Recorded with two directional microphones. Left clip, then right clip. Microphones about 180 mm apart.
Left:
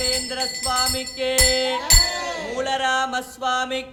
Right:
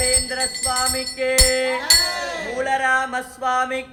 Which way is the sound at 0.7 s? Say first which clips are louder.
Left 1 dB; 5° left (ahead or behind).